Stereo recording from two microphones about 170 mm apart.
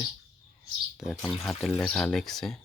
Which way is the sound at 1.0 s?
Centre (ahead or behind).